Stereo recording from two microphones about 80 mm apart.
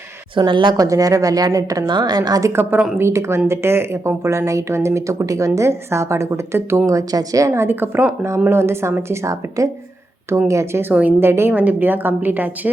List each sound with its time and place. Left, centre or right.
0.3 s a woman's voice: right
0.8 s speech: right
1.9 s a woman's voice: right
2.5 s a woman's voice: right